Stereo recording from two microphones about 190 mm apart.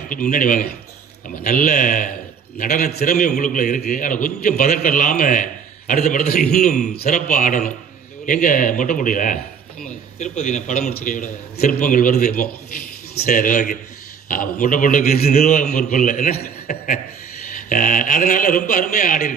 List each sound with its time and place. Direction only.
0.1 s a man's voice: 45° left (ahead or behind)